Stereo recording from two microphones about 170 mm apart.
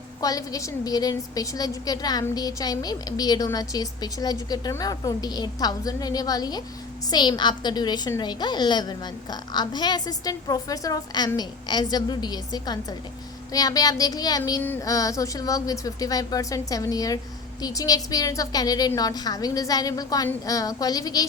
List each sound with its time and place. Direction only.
0.2 s a woman's voice: 20° left (ahead or behind)